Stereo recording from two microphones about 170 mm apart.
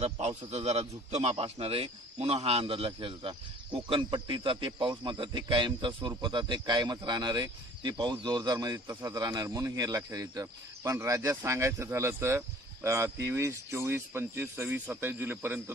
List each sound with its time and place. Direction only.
0.0 s a man's voice: 40° right (ahead or behind); by 15.6 s 10° right (ahead or behind)